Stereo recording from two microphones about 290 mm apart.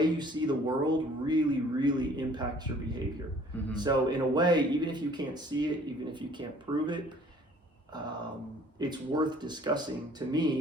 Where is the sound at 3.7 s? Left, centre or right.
Centre.